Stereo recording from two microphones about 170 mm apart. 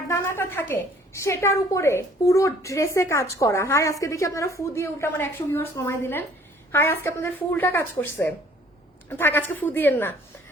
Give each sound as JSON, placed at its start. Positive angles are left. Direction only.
{"t": 0.1, "sound": "a woman's voice", "side_deg": 15}